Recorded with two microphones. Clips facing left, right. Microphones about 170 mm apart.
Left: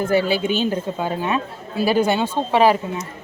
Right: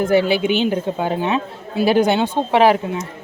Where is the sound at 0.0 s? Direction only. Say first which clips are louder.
Right 3 dB; 15° right (ahead or behind).